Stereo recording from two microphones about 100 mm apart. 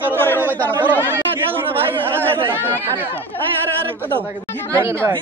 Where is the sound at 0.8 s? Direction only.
20° right (ahead or behind).